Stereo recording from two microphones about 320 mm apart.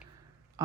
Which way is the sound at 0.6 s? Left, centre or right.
Centre.